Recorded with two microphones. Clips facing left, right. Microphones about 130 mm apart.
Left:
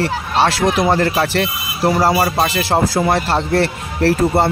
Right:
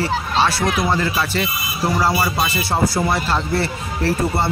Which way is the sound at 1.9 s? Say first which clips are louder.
Left 3 dB; 45° left (ahead or behind).